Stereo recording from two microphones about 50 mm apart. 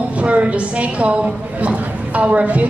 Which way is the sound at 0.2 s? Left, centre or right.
Right.